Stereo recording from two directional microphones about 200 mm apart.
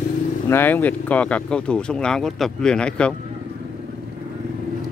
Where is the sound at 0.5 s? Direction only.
10° left (ahead or behind).